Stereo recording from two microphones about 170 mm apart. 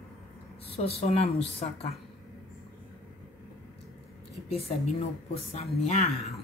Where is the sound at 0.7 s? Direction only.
35° left (ahead or behind).